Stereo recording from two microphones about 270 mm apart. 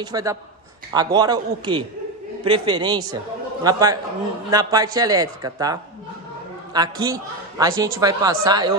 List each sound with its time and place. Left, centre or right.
0.0 s a man's voice: centre